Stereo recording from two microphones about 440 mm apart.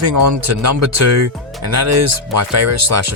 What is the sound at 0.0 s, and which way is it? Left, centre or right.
Speech, right.